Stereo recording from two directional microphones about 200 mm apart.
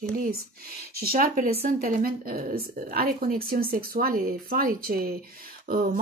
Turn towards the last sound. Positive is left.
turn(degrees=-40)  # may be behind; listen again after turning